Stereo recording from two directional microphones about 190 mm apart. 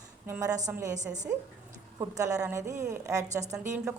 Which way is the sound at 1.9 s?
15° right (ahead or behind).